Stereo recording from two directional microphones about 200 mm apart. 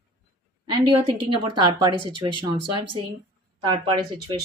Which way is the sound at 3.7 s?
20° right (ahead or behind).